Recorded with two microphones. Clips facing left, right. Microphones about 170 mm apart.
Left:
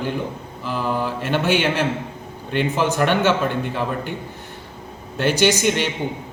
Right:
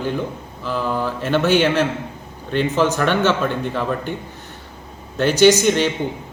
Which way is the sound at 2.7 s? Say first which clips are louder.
Right 1 dB; 15° left (ahead or behind).